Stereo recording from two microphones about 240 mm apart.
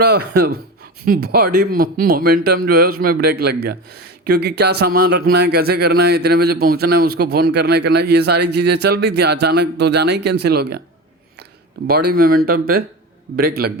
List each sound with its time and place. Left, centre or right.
0.0 s speech: right
11.9 s speech: right